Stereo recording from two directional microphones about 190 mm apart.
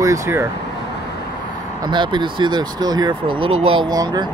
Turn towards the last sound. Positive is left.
turn(degrees=-20)  # may be behind; listen again after turning